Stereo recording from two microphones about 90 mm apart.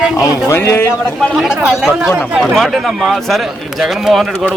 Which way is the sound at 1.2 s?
5° right (ahead or behind).